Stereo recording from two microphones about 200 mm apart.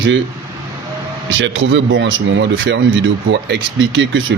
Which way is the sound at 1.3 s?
65° right (ahead or behind).